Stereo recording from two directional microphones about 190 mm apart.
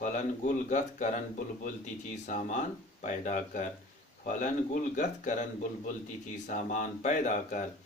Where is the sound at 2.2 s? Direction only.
40° left (ahead or behind).